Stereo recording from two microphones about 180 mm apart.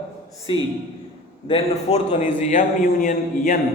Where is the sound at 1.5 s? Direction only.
35° left (ahead or behind).